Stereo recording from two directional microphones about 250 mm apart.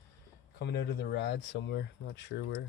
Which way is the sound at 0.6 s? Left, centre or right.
Left.